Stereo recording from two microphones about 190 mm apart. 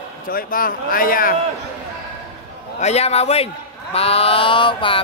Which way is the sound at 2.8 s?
35° left (ahead or behind).